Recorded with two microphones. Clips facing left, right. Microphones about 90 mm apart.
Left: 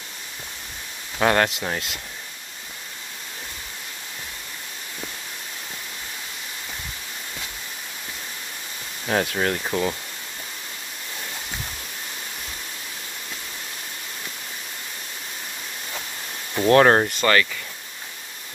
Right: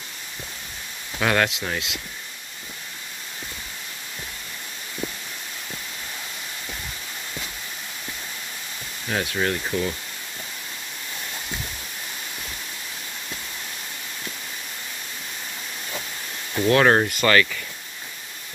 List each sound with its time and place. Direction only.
1.2 s speech: 35° left (ahead or behind)
9.2 s speech: 55° left (ahead or behind)
16.6 s speech: 35° left (ahead or behind)